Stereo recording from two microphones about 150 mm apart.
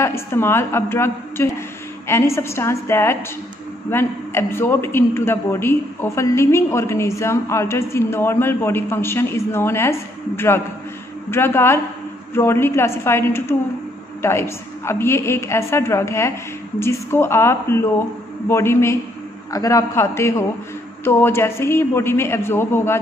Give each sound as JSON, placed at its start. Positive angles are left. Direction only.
{"t": 0.0, "sound": "a man's voice", "side_deg": 15}